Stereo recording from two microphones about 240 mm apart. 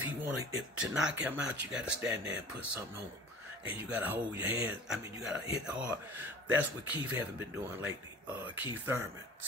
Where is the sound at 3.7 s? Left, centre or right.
Centre.